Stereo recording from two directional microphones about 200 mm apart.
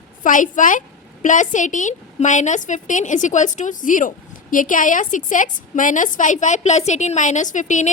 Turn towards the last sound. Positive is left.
turn(degrees=40)  # may be behind; listen again after turning